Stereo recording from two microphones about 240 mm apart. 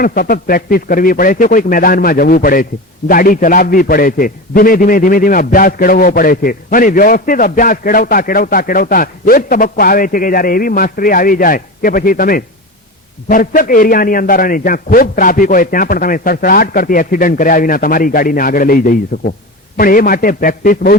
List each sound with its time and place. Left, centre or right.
0.0 s a man's voice: left